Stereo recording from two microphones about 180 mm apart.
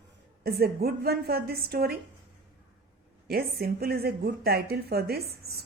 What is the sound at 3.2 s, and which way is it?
Speech, 60° right (ahead or behind).